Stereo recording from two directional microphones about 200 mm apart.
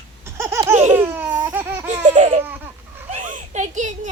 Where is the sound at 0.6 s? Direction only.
35° right (ahead or behind).